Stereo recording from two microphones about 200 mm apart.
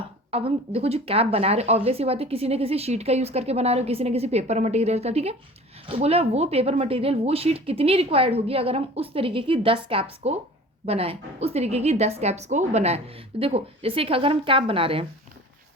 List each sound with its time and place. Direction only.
0.3 s speech: 30° right (ahead or behind)